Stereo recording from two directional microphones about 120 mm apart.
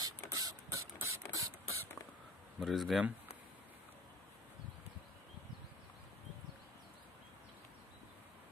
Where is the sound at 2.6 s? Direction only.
Centre (ahead or behind).